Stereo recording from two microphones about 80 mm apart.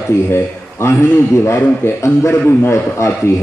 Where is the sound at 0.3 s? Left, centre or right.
Left.